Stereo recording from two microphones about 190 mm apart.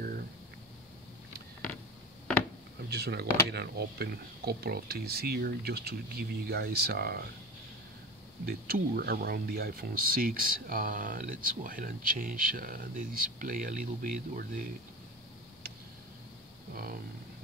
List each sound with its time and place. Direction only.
2.9 s speech: 60° right (ahead or behind)
8.5 s speech: 50° right (ahead or behind)
16.7 s speech: 50° right (ahead or behind)